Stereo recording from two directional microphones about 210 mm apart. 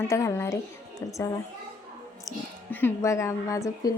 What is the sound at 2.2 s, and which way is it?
Speech, 10° left (ahead or behind).